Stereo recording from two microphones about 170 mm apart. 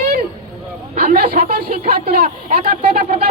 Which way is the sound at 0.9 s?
55° right (ahead or behind).